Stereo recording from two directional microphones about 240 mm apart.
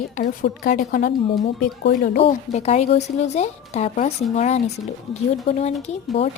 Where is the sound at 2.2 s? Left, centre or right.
Left.